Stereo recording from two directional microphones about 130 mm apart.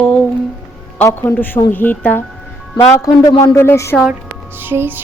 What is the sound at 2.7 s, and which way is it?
Speech, 25° left (ahead or behind).